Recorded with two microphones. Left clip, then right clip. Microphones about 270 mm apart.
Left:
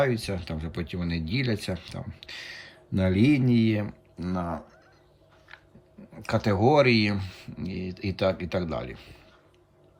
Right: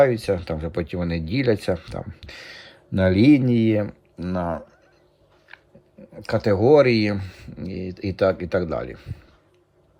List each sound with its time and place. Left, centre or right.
0.0 s speech: centre
6.1 s speech: centre